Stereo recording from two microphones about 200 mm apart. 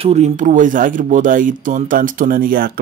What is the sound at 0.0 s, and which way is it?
Speech, 35° right (ahead or behind).